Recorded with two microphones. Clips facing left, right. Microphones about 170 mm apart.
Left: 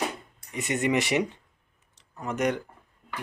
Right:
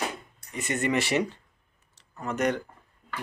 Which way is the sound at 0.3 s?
20° left (ahead or behind).